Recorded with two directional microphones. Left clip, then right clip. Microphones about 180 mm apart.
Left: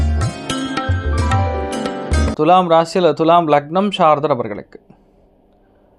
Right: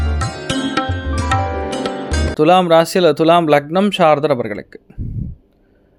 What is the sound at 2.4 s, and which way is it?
Speech, 25° right (ahead or behind).